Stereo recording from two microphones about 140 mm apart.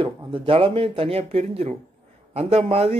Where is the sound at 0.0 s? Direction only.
40° right (ahead or behind).